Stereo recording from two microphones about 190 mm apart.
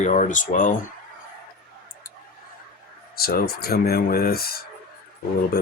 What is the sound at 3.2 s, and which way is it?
Speech, 55° left (ahead or behind).